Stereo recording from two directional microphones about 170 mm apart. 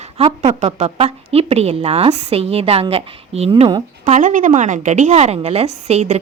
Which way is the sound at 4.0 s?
45° right (ahead or behind).